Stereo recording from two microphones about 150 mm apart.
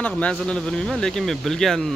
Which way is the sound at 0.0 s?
10° left (ahead or behind).